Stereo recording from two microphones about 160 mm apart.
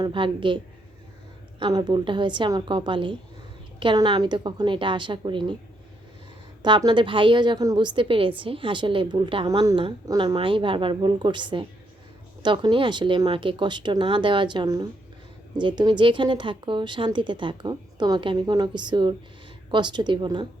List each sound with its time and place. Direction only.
0.0 s a woman's voice: 30° right (ahead or behind)
6.6 s a woman's voice: 30° right (ahead or behind)